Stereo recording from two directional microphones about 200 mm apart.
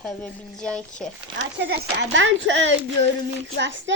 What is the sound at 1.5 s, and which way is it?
Speech, 55° right (ahead or behind).